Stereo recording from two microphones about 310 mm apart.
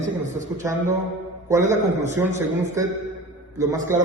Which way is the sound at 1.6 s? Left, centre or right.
Right.